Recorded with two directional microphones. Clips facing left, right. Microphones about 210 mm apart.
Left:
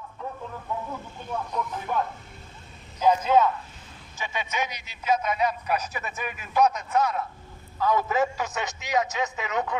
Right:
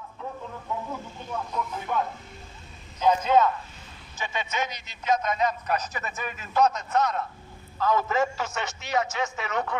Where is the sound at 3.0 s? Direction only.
10° left (ahead or behind).